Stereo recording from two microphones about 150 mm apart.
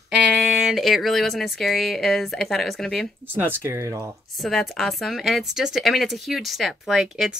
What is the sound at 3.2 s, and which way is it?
Speech, 15° right (ahead or behind).